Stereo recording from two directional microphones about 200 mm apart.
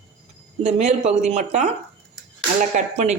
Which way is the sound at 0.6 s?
35° right (ahead or behind).